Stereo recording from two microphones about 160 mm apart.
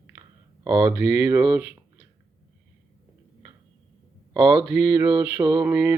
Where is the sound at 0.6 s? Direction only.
35° right (ahead or behind).